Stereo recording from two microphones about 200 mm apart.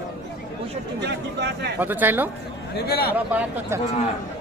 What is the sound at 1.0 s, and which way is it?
Speech, 55° right (ahead or behind).